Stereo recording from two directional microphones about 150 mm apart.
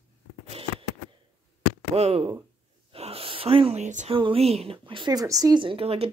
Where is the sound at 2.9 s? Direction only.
40° right (ahead or behind).